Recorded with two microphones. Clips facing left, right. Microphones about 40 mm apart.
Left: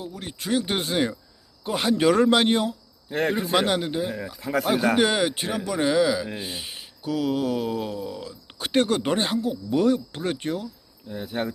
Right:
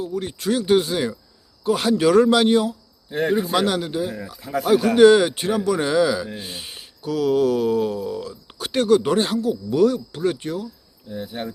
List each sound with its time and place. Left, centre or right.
0.1 s speech: centre
0.6 s speech: left
1.6 s speech: centre; by 3.5 s left
3.5 s speech: left
4.4 s speech: left
4.6 s speech: left
4.9 s speech: centre
8.7 s speech: left